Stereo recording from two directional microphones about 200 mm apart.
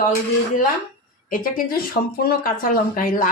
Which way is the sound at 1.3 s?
45° left (ahead or behind).